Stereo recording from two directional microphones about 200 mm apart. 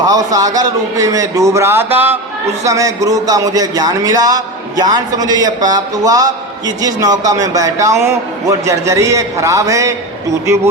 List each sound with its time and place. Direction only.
0.0 s a man's voice: 20° right (ahead or behind)